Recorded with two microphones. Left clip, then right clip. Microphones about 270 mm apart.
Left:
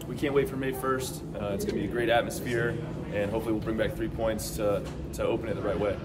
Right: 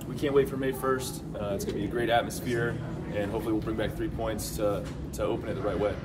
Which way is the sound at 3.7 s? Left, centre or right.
Centre.